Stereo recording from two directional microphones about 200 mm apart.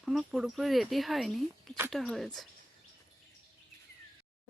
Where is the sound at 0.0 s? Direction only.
Centre (ahead or behind).